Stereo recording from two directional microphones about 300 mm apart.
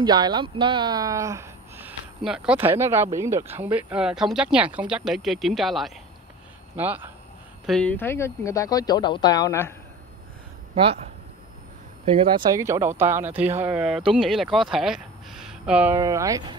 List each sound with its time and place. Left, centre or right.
0.0 s speech: centre
10.7 s speech: centre